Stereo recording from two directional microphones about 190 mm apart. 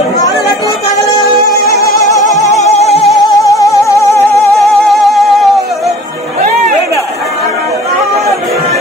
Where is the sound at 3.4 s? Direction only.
15° left (ahead or behind).